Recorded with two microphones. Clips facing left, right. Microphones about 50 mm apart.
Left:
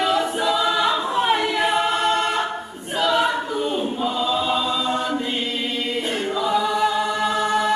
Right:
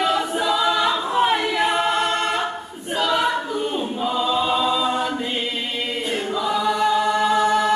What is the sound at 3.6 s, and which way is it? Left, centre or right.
Choir, centre.